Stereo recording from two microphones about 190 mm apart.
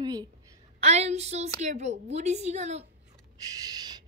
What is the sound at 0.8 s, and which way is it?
A woman's voice, 35° right (ahead or behind).